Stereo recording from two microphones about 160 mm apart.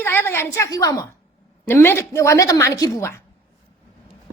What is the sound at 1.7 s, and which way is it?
A woman's voice, 15° left (ahead or behind).